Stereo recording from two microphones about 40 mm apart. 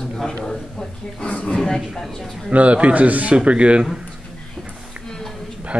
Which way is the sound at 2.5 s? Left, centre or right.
Right.